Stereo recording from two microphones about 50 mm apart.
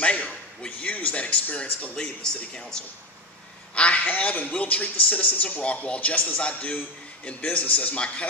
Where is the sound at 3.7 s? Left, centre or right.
Left.